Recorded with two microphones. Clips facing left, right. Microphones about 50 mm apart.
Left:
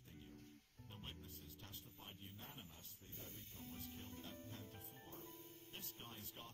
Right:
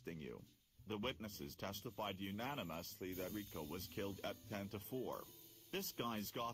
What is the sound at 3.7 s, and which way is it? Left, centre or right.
Speech, right.